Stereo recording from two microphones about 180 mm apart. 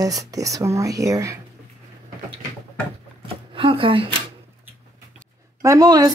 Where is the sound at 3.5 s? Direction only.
30° right (ahead or behind).